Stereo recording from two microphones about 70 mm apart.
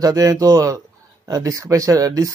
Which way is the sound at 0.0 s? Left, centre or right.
Right.